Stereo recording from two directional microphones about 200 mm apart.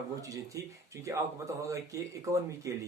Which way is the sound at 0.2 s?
15° right (ahead or behind).